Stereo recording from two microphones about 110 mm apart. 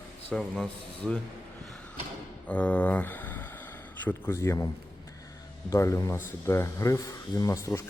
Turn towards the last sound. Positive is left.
turn(degrees=25)  # may be behind; listen again after turning